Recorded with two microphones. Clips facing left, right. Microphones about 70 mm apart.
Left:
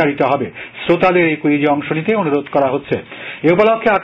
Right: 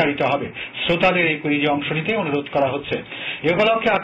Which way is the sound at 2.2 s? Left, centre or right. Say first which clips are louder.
Left 5 dB; left.